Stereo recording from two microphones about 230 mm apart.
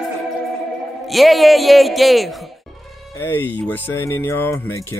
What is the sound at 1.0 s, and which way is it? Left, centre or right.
Speech, centre.